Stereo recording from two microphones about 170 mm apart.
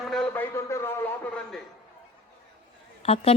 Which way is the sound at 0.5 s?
15° left (ahead or behind).